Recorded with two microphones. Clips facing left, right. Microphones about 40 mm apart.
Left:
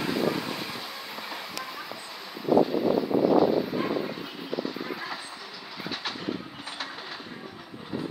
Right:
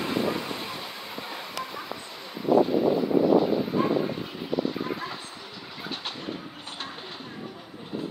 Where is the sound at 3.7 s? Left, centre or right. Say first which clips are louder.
Right 4 dB; centre.